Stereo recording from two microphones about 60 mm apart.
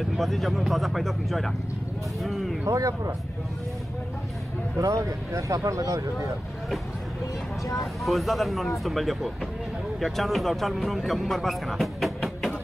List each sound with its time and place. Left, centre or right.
0.0 s speech: centre
2.2 s a sound: centre
2.6 s speech: right
4.7 s speech: right
7.7 s speech: centre